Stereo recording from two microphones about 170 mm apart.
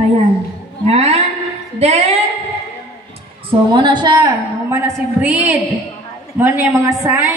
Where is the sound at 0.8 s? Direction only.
40° right (ahead or behind).